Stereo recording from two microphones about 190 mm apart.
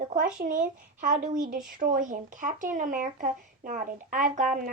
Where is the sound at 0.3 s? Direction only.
45° right (ahead or behind).